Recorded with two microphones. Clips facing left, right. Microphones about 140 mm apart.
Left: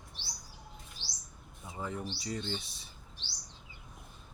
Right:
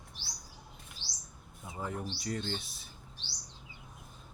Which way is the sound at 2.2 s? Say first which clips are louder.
Right 2 dB; 5° left (ahead or behind).